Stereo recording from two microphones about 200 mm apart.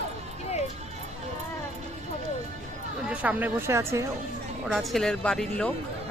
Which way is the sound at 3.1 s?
5° right (ahead or behind).